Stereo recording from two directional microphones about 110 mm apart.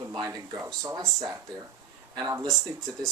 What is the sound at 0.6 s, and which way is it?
Speech, 30° right (ahead or behind).